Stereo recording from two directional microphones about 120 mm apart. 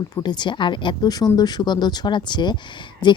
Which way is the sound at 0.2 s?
40° left (ahead or behind).